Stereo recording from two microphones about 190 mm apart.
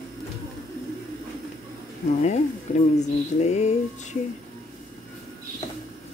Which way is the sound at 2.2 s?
40° left (ahead or behind).